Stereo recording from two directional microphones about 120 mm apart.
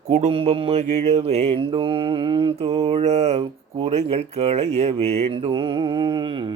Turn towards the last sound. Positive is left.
turn(degrees=-45)  # may be behind; listen again after turning